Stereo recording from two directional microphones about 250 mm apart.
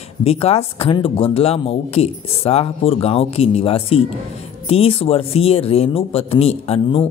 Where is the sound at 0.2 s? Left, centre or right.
Left.